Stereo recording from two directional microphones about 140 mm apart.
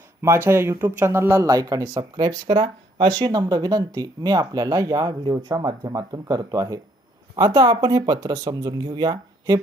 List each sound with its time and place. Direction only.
0.2 s speech: 15° right (ahead or behind)